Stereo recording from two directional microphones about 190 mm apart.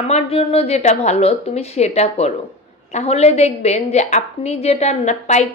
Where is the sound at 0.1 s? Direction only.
30° left (ahead or behind).